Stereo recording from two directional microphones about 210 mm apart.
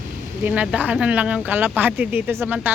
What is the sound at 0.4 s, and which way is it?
Speech, 5° right (ahead or behind).